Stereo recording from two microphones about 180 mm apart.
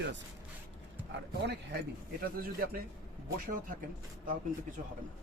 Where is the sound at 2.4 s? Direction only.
55° right (ahead or behind).